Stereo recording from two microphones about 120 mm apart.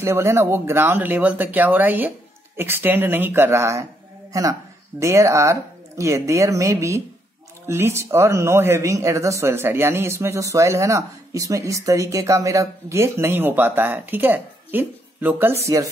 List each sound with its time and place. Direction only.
0.0 s speech: 20° right (ahead or behind)